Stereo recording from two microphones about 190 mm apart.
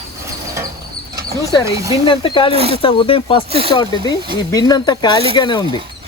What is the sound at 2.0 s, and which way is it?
Speech, 25° left (ahead or behind).